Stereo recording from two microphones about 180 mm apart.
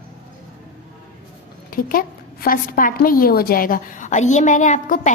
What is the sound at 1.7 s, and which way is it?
A woman's voice, 55° left (ahead or behind).